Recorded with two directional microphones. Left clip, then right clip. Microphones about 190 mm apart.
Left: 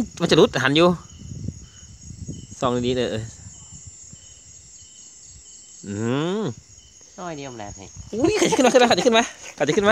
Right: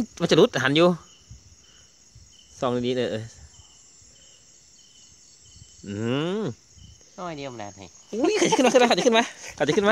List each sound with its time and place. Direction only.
0.0 s speech: 5° right (ahead or behind)
2.5 s speech: centre (ahead or behind)
5.9 s speech: centre (ahead or behind)
7.2 s speech: 30° right (ahead or behind)
8.1 s speech: 5° right (ahead or behind)